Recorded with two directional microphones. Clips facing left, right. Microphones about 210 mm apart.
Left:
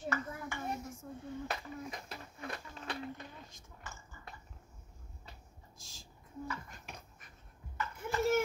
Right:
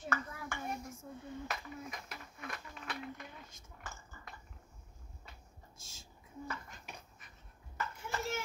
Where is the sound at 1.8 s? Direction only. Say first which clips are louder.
Left 2 dB; 30° left (ahead or behind).